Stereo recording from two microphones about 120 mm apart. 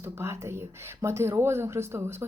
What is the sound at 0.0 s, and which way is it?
Speech, 20° right (ahead or behind).